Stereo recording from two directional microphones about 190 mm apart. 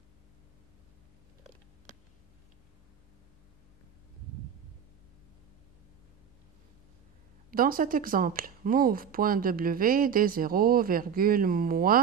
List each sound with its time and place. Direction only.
7.5 s speech: 50° right (ahead or behind)